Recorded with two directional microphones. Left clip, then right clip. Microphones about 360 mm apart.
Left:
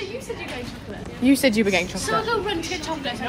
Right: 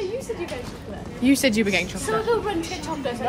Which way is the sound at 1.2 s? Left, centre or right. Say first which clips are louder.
Left 1 dB; centre.